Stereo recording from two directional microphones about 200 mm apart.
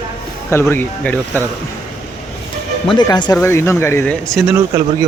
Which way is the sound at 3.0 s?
20° left (ahead or behind).